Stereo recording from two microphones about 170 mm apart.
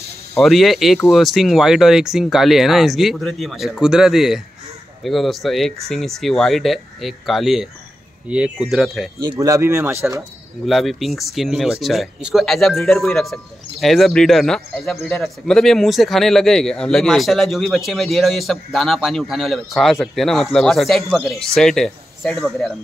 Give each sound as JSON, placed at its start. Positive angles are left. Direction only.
{"t": 0.4, "sound": "speech", "side_deg": 0}
{"t": 9.2, "sound": "speech", "side_deg": -20}
{"t": 10.6, "sound": "speech", "side_deg": 0}